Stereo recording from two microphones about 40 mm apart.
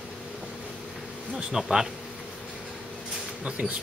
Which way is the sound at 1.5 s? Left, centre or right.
Centre.